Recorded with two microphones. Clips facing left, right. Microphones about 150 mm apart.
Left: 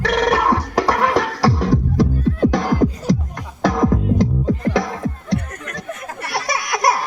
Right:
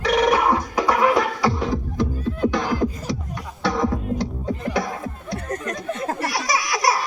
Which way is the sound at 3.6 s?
90° left.